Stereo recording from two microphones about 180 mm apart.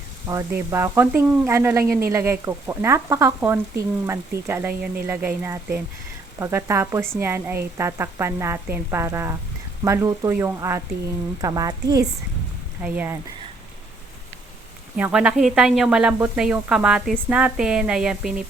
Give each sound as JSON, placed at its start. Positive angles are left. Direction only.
{"t": 0.3, "sound": "speech", "side_deg": -15}
{"t": 12.8, "sound": "speech", "side_deg": -10}
{"t": 14.9, "sound": "speech", "side_deg": -5}